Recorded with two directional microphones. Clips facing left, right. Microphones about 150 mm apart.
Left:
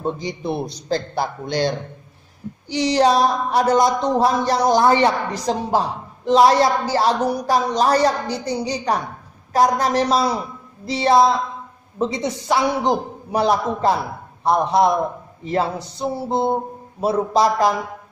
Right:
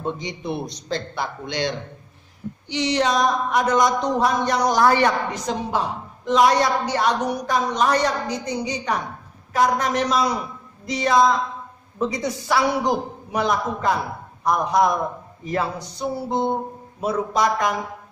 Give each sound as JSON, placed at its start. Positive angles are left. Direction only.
{"t": 0.0, "sound": "a woman's voice", "side_deg": 35}
{"t": 5.3, "sound": "a woman's voice", "side_deg": 35}
{"t": 13.3, "sound": "a woman's voice", "side_deg": 35}